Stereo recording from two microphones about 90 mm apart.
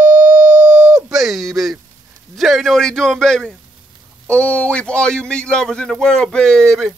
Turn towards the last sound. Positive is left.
turn(degrees=5)  # may be behind; listen again after turning